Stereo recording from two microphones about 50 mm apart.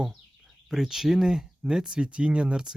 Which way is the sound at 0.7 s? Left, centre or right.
Centre.